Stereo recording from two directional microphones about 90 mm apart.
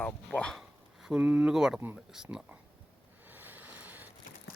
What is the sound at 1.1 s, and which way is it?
Speech, 15° right (ahead or behind).